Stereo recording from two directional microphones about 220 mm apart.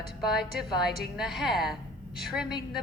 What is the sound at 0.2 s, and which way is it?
A woman's voice, centre (ahead or behind).